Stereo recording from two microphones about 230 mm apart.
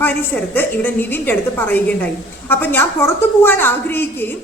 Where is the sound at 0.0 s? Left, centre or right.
Centre.